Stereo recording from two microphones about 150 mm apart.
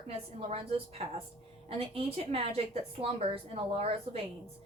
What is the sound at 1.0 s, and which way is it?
A woman's voice, 45° right (ahead or behind).